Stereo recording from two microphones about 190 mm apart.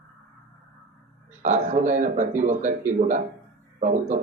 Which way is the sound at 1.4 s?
40° right (ahead or behind).